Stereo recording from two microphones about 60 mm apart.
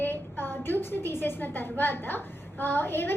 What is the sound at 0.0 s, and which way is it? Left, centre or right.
A woman's voice, left.